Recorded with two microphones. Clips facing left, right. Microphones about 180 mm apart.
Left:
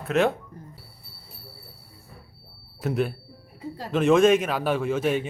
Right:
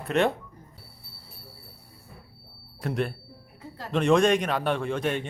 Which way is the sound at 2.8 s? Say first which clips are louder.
Left 3 dB; centre (ahead or behind).